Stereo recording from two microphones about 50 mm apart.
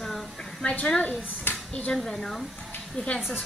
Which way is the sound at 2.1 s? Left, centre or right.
Centre.